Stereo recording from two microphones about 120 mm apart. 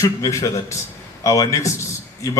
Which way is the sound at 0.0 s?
25° left (ahead or behind).